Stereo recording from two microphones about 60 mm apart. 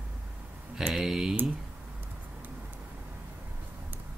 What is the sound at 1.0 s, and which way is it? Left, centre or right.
Speech, centre.